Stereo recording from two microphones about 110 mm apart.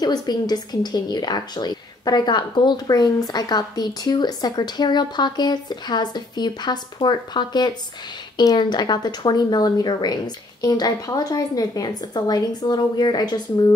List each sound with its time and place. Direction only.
0.0 s a woman's voice: 40° left (ahead or behind)